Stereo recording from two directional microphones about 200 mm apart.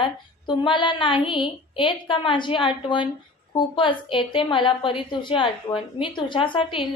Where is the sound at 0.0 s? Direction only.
25° left (ahead or behind).